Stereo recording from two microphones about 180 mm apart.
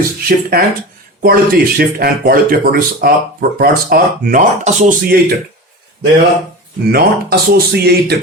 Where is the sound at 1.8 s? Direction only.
55° right (ahead or behind).